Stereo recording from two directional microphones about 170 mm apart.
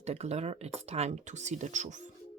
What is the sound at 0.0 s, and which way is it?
Speech, 40° right (ahead or behind).